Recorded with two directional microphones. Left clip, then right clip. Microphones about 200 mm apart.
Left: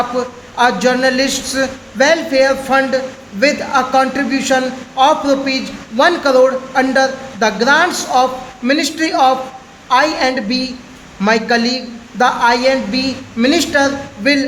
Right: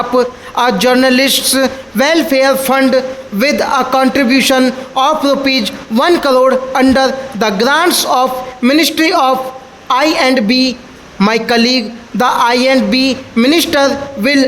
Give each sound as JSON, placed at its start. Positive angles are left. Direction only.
{"t": 0.2, "sound": "a man's voice", "side_deg": -50}